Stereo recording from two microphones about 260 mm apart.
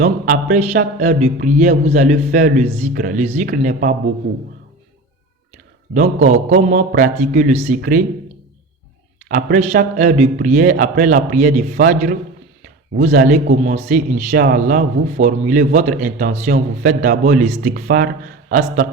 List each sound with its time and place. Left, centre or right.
0.0 s a man's voice: right
5.9 s a man's voice: right
9.3 s a man's voice: right